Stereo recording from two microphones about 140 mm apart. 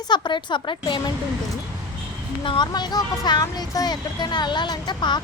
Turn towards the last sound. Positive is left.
turn(degrees=35)  # may be behind; listen again after turning